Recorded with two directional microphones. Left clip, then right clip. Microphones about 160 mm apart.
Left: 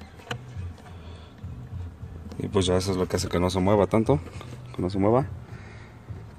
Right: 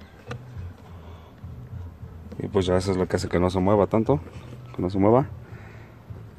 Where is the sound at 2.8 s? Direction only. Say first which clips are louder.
Right 2 dB; 30° right (ahead or behind).